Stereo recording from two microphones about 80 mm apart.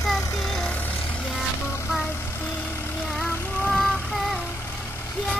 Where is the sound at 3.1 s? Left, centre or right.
Centre.